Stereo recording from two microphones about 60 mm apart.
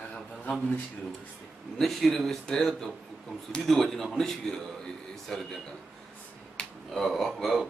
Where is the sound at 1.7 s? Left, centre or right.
Centre.